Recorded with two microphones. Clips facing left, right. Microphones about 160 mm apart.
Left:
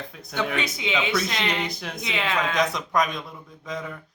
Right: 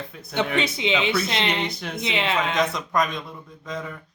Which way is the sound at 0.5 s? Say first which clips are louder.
Right 3 dB; 25° right (ahead or behind).